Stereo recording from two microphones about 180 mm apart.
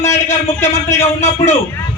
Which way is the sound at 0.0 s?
15° left (ahead or behind).